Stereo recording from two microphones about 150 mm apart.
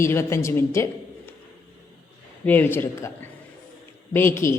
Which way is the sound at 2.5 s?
15° left (ahead or behind).